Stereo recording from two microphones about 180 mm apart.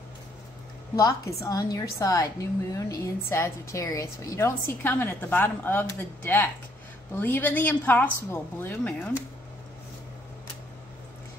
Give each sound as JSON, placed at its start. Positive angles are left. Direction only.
{"t": 0.9, "sound": "a woman's voice", "side_deg": 20}